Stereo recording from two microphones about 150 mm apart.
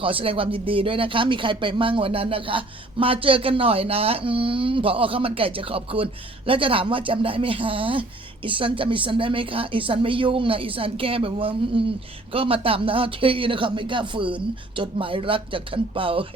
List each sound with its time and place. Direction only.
0.0 s speech: 35° right (ahead or behind)